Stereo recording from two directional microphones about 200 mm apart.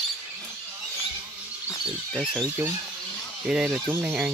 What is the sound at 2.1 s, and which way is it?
Speech, 10° right (ahead or behind).